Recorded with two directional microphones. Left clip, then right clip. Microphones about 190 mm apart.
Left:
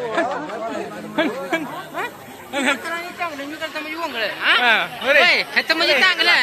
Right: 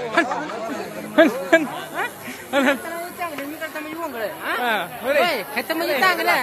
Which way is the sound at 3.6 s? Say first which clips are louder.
Left 5 dB; 10° right (ahead or behind).